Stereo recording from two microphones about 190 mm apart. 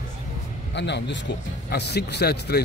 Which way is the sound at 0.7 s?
65° left (ahead or behind).